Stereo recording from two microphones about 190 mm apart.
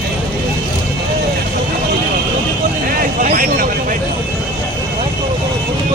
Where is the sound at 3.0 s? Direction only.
45° right (ahead or behind).